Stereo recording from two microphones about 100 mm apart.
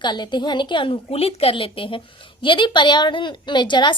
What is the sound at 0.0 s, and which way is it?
A woman's voice, 50° left (ahead or behind).